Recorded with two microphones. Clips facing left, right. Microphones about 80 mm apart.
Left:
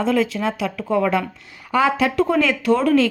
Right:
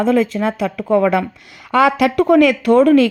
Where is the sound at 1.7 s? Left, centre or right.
Right.